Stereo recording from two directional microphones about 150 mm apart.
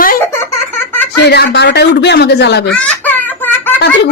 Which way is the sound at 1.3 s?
90° left.